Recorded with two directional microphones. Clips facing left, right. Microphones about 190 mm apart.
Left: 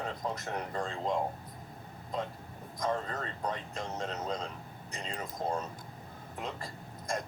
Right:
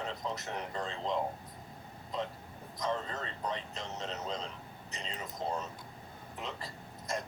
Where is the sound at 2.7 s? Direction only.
50° left (ahead or behind).